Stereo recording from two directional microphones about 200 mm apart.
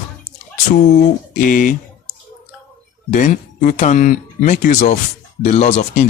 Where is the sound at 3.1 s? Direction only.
40° left (ahead or behind).